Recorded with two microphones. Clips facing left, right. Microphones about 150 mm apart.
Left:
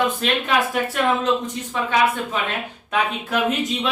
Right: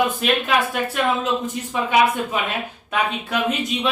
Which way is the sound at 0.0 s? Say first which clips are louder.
Right 1 dB; 5° right (ahead or behind).